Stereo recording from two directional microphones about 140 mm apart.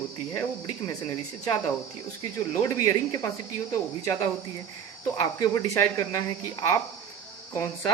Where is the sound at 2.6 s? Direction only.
25° left (ahead or behind).